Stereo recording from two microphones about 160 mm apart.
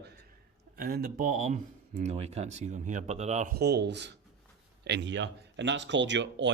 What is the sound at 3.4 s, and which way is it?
Speech, 80° right.